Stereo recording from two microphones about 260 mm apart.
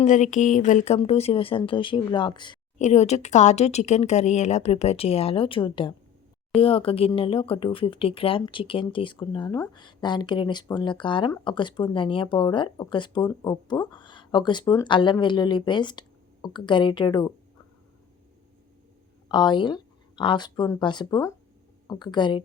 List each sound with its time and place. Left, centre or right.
0.0 s speech: left
19.3 s speech: centre